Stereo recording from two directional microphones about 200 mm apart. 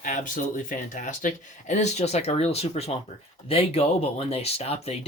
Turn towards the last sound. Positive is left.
turn(degrees=30)  # may be behind; listen again after turning